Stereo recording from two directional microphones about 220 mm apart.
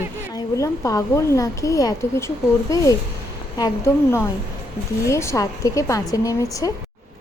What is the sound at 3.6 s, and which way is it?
A woman's voice, 10° left (ahead or behind).